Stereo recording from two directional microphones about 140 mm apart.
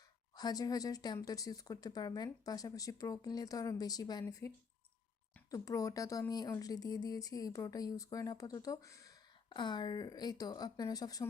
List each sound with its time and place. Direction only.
0.3 s speech: 30° left (ahead or behind)
9.5 s speech: 35° left (ahead or behind)